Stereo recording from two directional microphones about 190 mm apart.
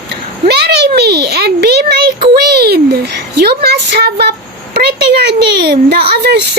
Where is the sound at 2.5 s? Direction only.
55° right (ahead or behind).